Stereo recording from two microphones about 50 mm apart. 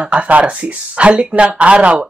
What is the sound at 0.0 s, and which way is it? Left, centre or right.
Speech, right.